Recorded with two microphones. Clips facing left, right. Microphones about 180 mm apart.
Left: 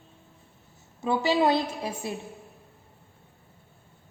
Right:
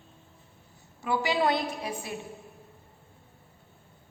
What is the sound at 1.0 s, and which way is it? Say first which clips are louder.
A woman's voice: left 3 dB; 25° left (ahead or behind).